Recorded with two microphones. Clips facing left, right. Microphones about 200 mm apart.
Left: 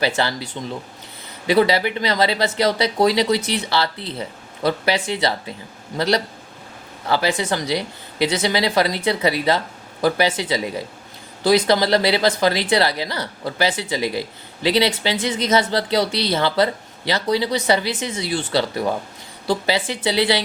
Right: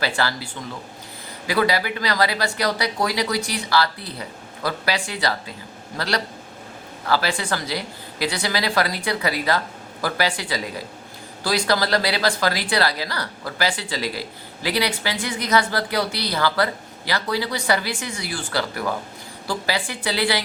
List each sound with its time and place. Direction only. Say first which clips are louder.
0.0 s speech: left 3 dB; 20° left (ahead or behind)